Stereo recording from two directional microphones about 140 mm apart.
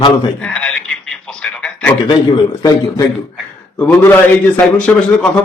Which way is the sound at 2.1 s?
30° left (ahead or behind).